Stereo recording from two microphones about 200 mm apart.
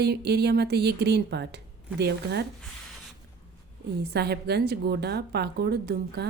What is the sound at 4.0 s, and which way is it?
A woman's voice, 55° right (ahead or behind).